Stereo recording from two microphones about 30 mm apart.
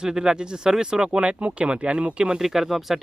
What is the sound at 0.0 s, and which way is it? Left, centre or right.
Speech, right.